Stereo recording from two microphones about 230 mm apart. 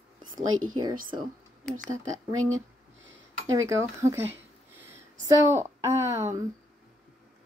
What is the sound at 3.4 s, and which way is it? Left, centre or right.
Speech, centre.